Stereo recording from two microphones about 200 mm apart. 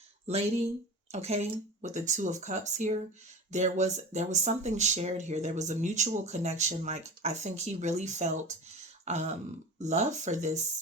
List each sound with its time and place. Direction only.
1.1 s speech: 35° right (ahead or behind)
9.0 s throat clearing: 35° right (ahead or behind)
9.7 s speech: 35° right (ahead or behind)